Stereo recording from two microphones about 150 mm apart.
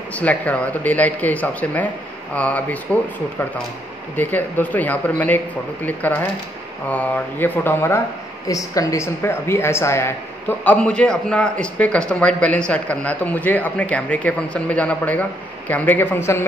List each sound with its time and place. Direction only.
0.1 s a man's voice: 10° left (ahead or behind)